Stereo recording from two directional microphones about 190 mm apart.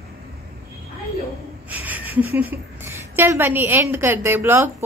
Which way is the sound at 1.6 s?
10° right (ahead or behind).